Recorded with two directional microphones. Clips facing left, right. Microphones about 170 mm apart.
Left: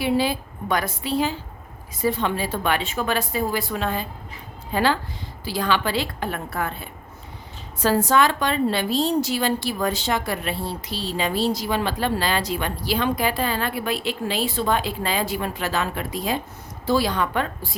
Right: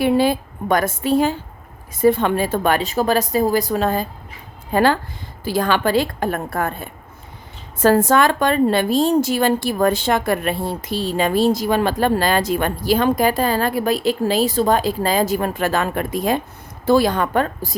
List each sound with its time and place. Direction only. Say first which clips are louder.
0.0 s a woman's voice: right 6 dB; 50° right (ahead or behind)